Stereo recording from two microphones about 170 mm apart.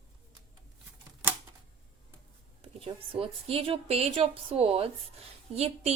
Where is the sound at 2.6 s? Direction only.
35° right (ahead or behind).